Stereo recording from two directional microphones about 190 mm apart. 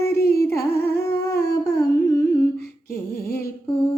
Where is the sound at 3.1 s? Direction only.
50° left (ahead or behind).